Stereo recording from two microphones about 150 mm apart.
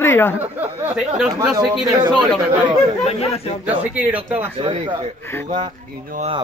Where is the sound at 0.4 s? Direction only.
10° right (ahead or behind).